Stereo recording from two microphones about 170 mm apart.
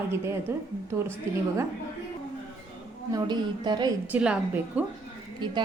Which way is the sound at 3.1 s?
25° right (ahead or behind).